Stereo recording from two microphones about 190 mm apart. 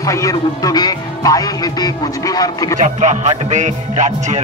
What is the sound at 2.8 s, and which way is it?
Music, 40° right (ahead or behind).